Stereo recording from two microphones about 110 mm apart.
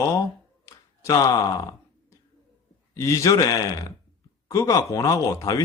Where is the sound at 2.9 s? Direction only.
25° left (ahead or behind).